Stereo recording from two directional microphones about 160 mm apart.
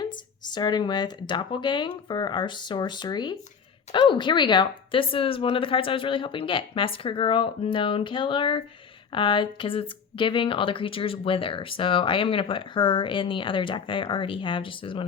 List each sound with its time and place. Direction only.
0.0 s speech: 25° left (ahead or behind)